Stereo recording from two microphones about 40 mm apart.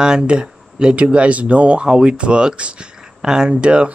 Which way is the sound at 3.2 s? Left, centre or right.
Centre.